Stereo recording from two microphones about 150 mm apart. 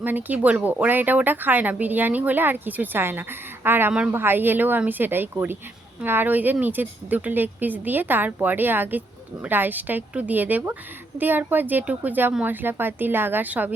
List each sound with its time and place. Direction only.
0.0 s speech: 10° right (ahead or behind)